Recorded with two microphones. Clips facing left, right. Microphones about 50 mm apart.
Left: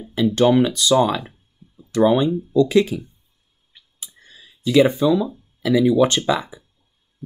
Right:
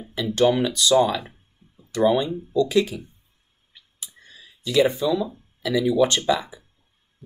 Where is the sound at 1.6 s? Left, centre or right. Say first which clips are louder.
Left 8 dB; right.